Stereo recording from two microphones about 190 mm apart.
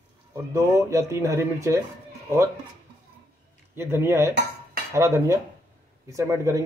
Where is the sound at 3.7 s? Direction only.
15° right (ahead or behind).